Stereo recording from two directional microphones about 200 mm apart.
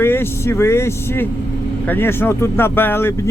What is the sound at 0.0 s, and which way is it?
Speech, 10° left (ahead or behind).